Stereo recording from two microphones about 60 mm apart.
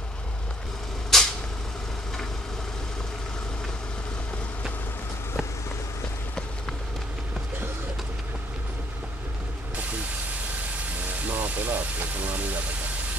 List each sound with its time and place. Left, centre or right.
1.1 s vehicle: centre
11.2 s vehicle: right